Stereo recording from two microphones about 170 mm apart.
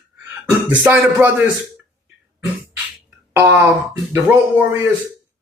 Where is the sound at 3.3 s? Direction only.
15° right (ahead or behind).